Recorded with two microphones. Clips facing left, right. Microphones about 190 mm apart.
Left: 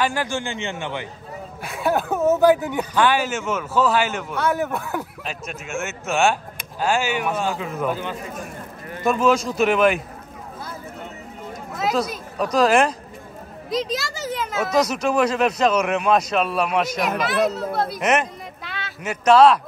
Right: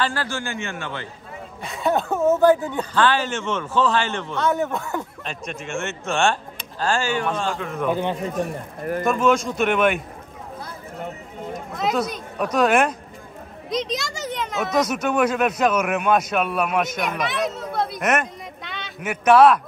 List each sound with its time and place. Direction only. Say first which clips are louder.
0.0 s speech: left 2 dB; 15° left (ahead or behind)
1.6 s speech: even; centre (ahead or behind)
7.9 s speech: right 4 dB; 20° right (ahead or behind)
9.0 s speech: left 1 dB; centre (ahead or behind)
11.7 s speech: left 1 dB; centre (ahead or behind)